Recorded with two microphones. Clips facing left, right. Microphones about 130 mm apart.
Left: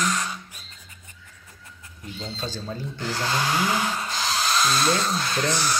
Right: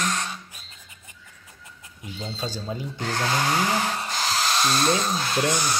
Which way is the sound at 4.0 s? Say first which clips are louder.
Even; 40° right (ahead or behind).